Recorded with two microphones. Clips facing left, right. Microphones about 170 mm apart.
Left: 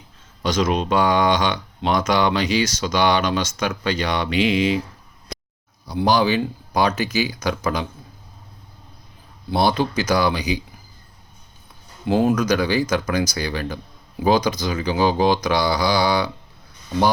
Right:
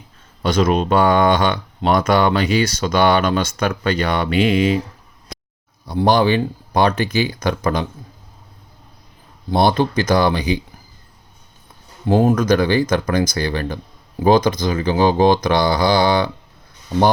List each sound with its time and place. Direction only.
0.4 s speech: 55° right (ahead or behind)
5.9 s speech: 50° right (ahead or behind)
9.5 s speech: 50° right (ahead or behind)
12.0 s speech: 45° right (ahead or behind)